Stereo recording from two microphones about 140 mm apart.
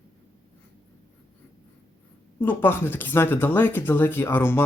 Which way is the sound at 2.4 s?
15° left (ahead or behind).